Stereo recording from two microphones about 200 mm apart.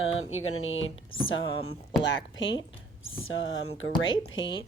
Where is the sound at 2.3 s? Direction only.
65° left (ahead or behind).